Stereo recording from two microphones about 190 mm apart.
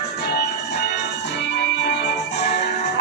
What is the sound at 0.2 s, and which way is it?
Music, 60° left (ahead or behind).